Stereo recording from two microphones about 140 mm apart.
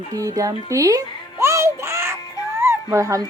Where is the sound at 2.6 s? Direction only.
20° right (ahead or behind).